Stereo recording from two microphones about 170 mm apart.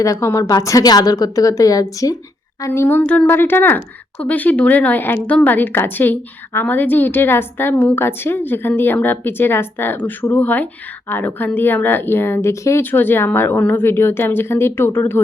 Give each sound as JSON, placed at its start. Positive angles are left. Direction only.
{"t": 0.0, "sound": "a woman's voice", "side_deg": 20}